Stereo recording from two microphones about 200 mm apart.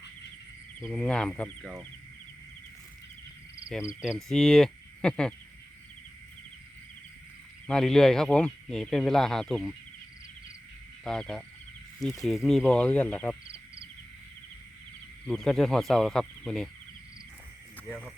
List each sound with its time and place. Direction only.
0.8 s speech: 5° left (ahead or behind)
4.0 s speech: centre (ahead or behind)
7.7 s speech: centre (ahead or behind)
11.0 s speech: 5° left (ahead or behind)
15.3 s speech: centre (ahead or behind)
17.8 s speech: 5° left (ahead or behind)